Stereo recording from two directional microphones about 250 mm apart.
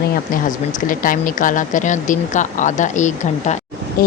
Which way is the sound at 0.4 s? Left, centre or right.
Left.